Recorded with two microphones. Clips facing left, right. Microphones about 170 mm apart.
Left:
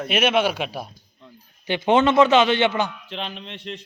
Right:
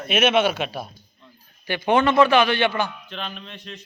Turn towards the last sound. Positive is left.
turn(degrees=25)  # may be behind; listen again after turning